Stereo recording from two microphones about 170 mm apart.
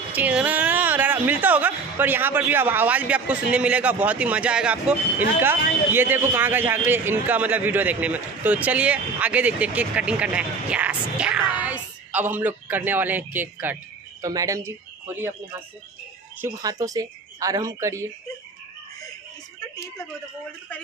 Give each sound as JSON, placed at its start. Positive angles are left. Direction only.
{"t": 0.1, "sound": "speech", "side_deg": -10}
{"t": 16.6, "sound": "speech", "side_deg": -20}
{"t": 19.6, "sound": "a sound", "side_deg": 20}